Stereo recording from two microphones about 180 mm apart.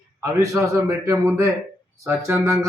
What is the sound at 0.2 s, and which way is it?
A man's voice, 15° right (ahead or behind).